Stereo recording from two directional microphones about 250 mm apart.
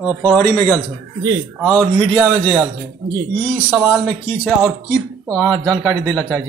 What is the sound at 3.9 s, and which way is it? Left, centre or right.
Speech, centre.